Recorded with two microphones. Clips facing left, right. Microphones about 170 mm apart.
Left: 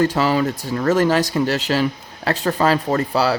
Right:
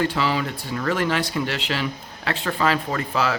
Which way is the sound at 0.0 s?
40° left (ahead or behind).